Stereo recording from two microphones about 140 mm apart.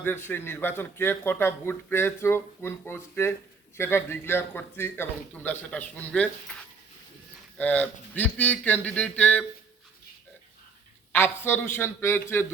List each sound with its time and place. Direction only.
0.0 s speech: 15° left (ahead or behind)
7.6 s speech: 10° left (ahead or behind)
11.1 s speech: 15° left (ahead or behind)